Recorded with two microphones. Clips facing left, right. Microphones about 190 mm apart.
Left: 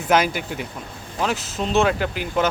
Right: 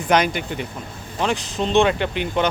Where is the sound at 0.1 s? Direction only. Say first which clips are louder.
Even; 5° left (ahead or behind).